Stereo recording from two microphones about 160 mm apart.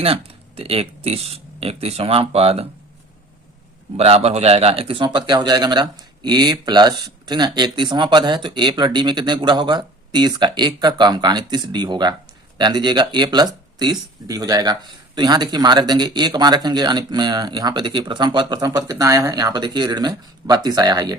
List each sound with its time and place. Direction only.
0.0 s speech: 35° right (ahead or behind)
3.9 s speech: 40° right (ahead or behind)